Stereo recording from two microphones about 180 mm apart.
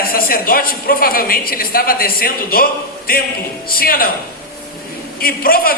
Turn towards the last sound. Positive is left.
turn(degrees=55)  # may be behind; listen again after turning